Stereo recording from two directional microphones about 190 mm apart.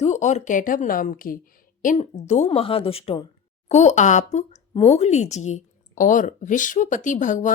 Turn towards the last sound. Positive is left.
turn(degrees=40)  # may be behind; listen again after turning